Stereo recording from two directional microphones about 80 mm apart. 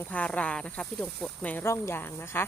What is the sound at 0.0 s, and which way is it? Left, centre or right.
Speech, centre.